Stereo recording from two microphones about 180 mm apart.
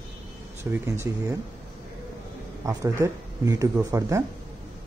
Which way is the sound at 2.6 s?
20° right (ahead or behind).